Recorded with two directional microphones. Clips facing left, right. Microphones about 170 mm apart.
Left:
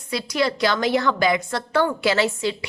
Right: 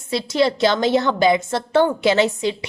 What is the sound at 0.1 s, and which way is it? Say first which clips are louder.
A woman's voice: right 4 dB; 25° right (ahead or behind).